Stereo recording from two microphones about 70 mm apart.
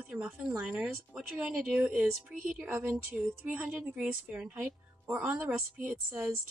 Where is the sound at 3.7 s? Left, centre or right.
Centre.